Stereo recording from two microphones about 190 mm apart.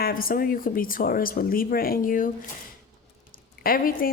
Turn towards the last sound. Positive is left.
turn(degrees=50)  # may be behind; listen again after turning